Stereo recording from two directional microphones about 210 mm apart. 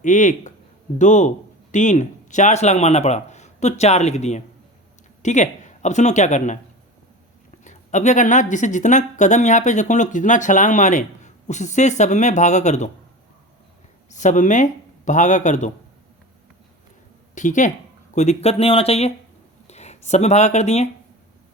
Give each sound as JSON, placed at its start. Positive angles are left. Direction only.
{"t": 0.0, "sound": "speech", "side_deg": 35}
{"t": 7.6, "sound": "speech", "side_deg": 35}
{"t": 14.1, "sound": "speech", "side_deg": 35}
{"t": 17.3, "sound": "speech", "side_deg": 35}